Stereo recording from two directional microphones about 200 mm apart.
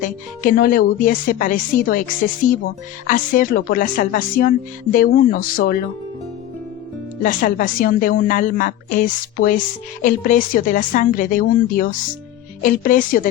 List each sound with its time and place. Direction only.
0.0 s a woman's voice: 45° left (ahead or behind)
7.2 s a woman's voice: 45° left (ahead or behind)